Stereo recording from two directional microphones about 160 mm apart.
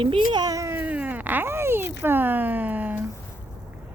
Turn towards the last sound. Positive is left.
turn(degrees=-10)  # may be behind; listen again after turning